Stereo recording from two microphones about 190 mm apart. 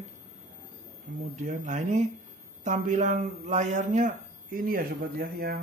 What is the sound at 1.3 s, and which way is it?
Speech, 40° right (ahead or behind).